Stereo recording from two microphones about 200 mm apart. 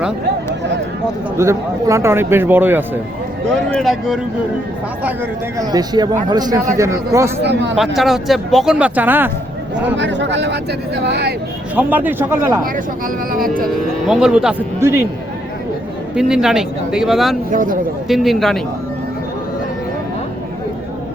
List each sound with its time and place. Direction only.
1.4 s speech: 15° right (ahead or behind)
3.7 s speech: centre (ahead or behind)
5.5 s speech: 20° right (ahead or behind)
7.4 s speech: 60° right (ahead or behind)
7.9 s speech: centre (ahead or behind)
10.0 s speech: 60° right (ahead or behind)
11.7 s speech: 10° right (ahead or behind)
13.3 s speech: 45° right (ahead or behind)
14.1 s speech: 5° right (ahead or behind)
16.1 s speech: 5° right (ahead or behind)
17.5 s a man's voice: 40° right (ahead or behind)
18.1 s speech: centre (ahead or behind)